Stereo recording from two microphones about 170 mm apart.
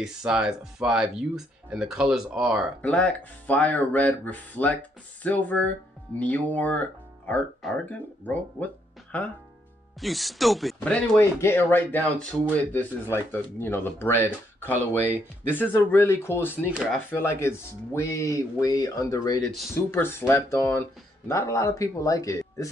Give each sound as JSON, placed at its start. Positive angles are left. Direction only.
{"t": 0.0, "sound": "speech", "side_deg": -5}
{"t": 2.8, "sound": "speech", "side_deg": 10}
{"t": 14.6, "sound": "speech", "side_deg": -10}
{"t": 15.7, "sound": "speech", "side_deg": 15}
{"t": 16.6, "sound": "speech", "side_deg": -5}
{"t": 17.1, "sound": "speech", "side_deg": 15}